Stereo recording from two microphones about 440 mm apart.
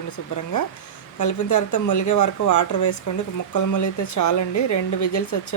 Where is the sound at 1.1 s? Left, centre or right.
Left.